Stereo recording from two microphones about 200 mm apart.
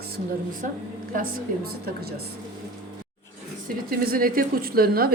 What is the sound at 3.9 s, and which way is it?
A woman's voice, 45° right (ahead or behind).